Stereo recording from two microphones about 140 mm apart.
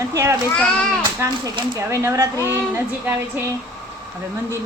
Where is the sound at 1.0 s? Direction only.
25° right (ahead or behind).